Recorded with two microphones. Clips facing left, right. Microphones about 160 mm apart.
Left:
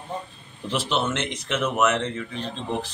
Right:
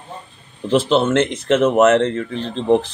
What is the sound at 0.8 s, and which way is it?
A man's voice, 50° right (ahead or behind).